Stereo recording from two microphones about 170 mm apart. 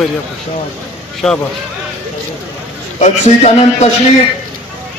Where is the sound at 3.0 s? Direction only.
40° left (ahead or behind).